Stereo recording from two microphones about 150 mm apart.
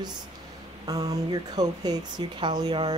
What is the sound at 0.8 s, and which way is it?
Speech, 25° right (ahead or behind).